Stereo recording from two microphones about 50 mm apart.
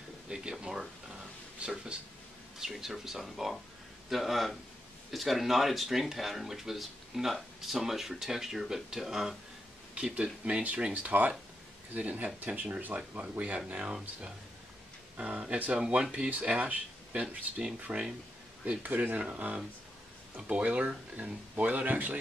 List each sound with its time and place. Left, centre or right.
0.3 s a sound: centre
1.9 s speech: centre
2.6 s speech: centre
9.9 s speech: right
13.7 s speech: right
15.1 s speech: right